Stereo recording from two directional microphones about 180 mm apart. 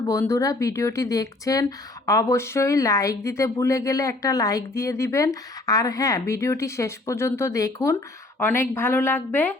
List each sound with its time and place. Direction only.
0.1 s speech: 15° left (ahead or behind)